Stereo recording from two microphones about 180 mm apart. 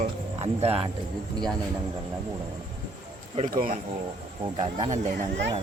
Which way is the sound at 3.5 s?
50° right (ahead or behind).